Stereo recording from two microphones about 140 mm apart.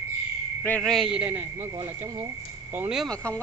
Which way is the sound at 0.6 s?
10° left (ahead or behind).